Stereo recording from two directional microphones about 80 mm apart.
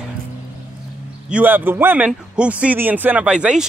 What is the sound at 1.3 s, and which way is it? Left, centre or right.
Speech, right.